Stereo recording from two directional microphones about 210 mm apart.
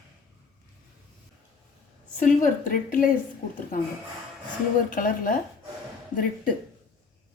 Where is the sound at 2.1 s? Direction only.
40° left (ahead or behind).